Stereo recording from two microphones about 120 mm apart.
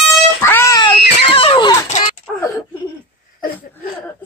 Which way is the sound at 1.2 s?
50° left (ahead or behind).